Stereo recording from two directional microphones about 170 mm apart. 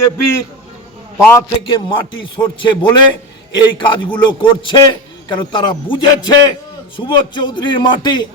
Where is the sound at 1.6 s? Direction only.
30° left (ahead or behind).